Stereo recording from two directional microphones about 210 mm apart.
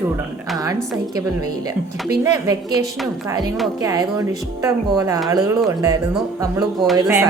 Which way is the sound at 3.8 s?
15° right (ahead or behind).